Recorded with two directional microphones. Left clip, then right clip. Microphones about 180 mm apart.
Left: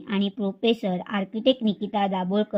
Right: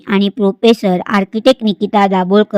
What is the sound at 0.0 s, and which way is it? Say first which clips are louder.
A woman's voice: right 14 dB; 40° right (ahead or behind).